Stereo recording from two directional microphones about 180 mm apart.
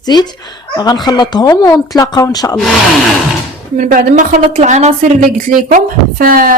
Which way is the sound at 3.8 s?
50° right (ahead or behind).